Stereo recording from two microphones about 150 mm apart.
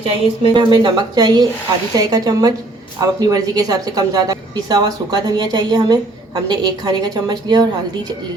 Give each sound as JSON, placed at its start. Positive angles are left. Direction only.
{"t": 0.0, "sound": "a woman's voice", "side_deg": -35}